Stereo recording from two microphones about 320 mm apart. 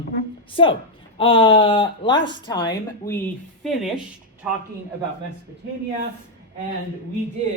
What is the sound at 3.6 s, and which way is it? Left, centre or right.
A woman's voice, centre.